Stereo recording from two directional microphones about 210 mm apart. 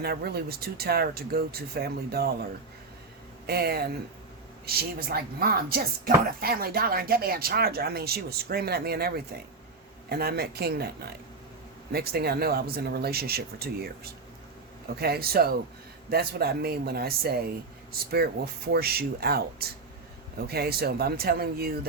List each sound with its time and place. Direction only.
0.0 s speech: 50° right (ahead or behind)
3.4 s speech: 50° right (ahead or behind)